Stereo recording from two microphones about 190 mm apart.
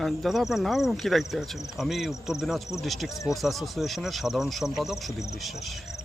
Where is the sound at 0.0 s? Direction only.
Centre (ahead or behind).